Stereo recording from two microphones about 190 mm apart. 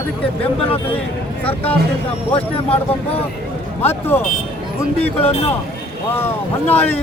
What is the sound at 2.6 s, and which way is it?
Speech, 30° left (ahead or behind).